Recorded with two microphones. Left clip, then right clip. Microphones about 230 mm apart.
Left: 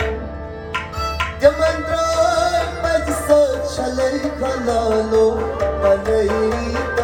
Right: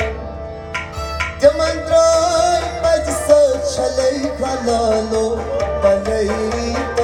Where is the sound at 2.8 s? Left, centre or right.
Right.